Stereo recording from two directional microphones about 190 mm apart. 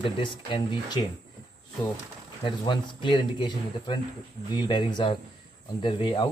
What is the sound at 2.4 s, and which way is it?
Speech, 25° left (ahead or behind).